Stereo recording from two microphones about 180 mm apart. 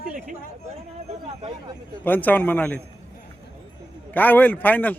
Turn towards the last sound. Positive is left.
turn(degrees=10)  # may be behind; listen again after turning